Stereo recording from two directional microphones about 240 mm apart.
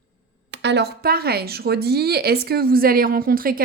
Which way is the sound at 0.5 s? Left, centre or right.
Right.